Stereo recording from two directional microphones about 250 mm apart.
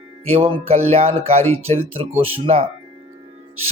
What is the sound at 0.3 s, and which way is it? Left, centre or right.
Music, right.